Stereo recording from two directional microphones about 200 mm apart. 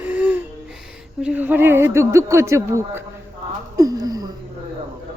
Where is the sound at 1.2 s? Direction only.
5° right (ahead or behind).